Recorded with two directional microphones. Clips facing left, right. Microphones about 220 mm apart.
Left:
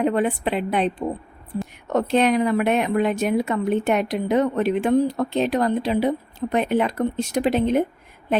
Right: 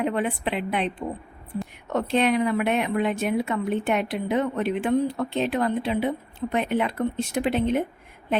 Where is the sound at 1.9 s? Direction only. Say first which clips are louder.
Left 3 dB; 45° left (ahead or behind).